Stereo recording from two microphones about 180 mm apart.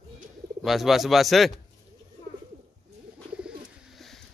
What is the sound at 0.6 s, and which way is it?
Speech, centre (ahead or behind).